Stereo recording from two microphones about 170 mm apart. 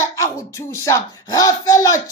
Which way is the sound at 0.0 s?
15° left (ahead or behind).